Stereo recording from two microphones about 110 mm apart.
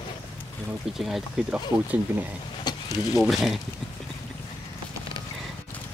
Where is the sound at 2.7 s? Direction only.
35° left (ahead or behind).